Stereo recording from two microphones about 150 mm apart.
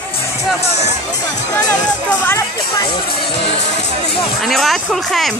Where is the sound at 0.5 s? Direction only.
45° left (ahead or behind).